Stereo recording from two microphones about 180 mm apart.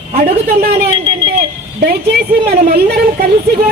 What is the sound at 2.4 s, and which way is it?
Speech, 60° right (ahead or behind).